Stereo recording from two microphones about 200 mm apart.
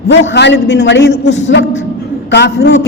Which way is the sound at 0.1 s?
60° left (ahead or behind).